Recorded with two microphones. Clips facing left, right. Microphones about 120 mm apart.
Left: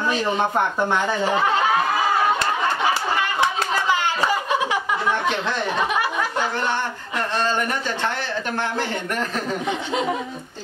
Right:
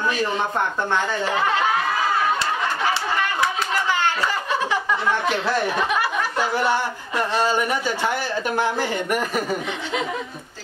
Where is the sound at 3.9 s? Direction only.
15° left (ahead or behind).